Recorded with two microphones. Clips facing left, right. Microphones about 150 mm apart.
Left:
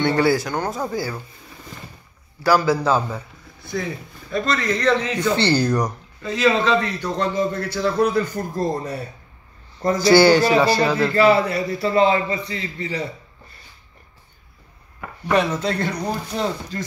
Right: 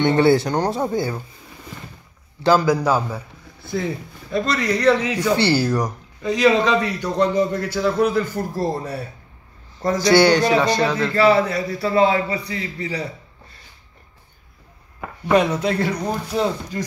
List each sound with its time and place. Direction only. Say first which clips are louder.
0.0 s speech: right 3 dB; 25° right (ahead or behind)
2.4 s a man's voice: right 1 dB; 20° right (ahead or behind)
4.3 s a man's voice: right 1 dB; 15° right (ahead or behind)
6.2 s a man's voice: right 2 dB; 15° right (ahead or behind)
15.0 s chopping: right 3 dB; 10° right (ahead or behind)
16.3 s a man's voice: right 3 dB; 5° right (ahead or behind)